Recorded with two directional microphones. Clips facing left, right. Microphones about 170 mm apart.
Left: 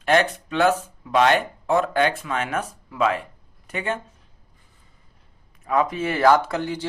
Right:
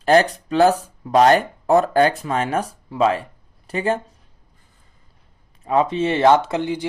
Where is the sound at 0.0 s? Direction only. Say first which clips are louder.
Right 4 dB; 35° right (ahead or behind).